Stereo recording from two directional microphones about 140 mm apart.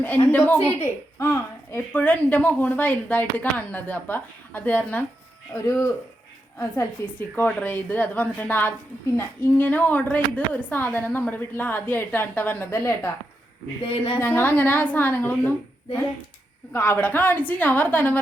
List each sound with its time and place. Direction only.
0.0 s a woman's voice: 10° left (ahead or behind)
13.8 s a woman's voice: 40° left (ahead or behind)
14.2 s a woman's voice: 15° left (ahead or behind)
16.7 s a woman's voice: 15° left (ahead or behind)